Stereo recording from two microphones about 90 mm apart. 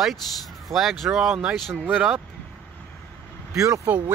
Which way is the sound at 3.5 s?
35° right (ahead or behind).